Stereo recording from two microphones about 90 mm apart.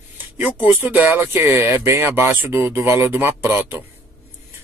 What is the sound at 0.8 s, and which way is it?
Speech, 20° right (ahead or behind).